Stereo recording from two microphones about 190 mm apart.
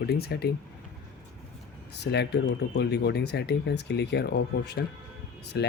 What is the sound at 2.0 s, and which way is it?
Speech, 60° left (ahead or behind).